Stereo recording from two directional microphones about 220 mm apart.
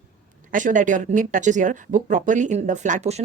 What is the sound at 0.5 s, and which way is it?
Speech, 35° right (ahead or behind).